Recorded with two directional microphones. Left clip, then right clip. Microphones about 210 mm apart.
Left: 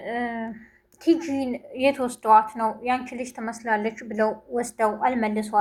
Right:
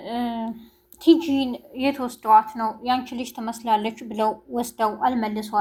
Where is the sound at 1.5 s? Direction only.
20° right (ahead or behind).